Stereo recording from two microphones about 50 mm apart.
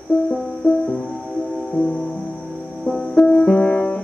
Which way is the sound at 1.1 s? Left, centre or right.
Left.